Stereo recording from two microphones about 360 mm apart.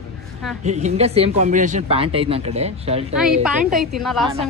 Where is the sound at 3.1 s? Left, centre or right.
Centre.